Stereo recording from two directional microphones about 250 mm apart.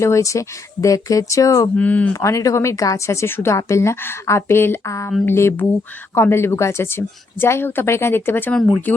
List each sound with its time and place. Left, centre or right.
0.0 s speech: centre